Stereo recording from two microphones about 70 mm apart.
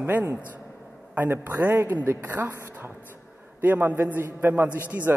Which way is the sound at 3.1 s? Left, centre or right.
Right.